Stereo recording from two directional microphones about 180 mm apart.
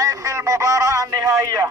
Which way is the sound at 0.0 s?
20° right (ahead or behind).